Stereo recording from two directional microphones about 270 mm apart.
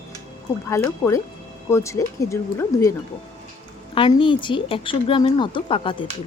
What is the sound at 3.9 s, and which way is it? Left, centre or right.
Speech, centre.